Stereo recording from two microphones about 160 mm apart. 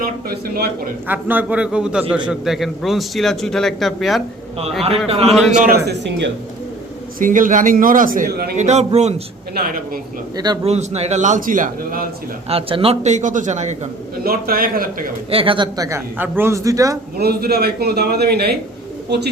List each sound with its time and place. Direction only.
0.0 s a man's voice: 70° right (ahead or behind)
1.0 s a man's voice: 10° right (ahead or behind)
5.0 s a man's voice: 40° right (ahead or behind)
5.3 s a man's voice: centre (ahead or behind)
5.8 s speech: 90° right
7.2 s a man's voice: 55° right (ahead or behind)
8.5 s a man's voice: 45° right (ahead or behind)
9.6 s a man's voice: 60° right (ahead or behind)
10.3 s a man's voice: 25° right (ahead or behind)
10.6 s a man's voice: 40° right (ahead or behind); by 12.0 s 60° right (ahead or behind)
12.5 s a man's voice: 35° right (ahead or behind)
14.3 s a man's voice: 65° right (ahead or behind)
15.3 s a man's voice: 35° right (ahead or behind)
17.2 s a man's voice: 80° right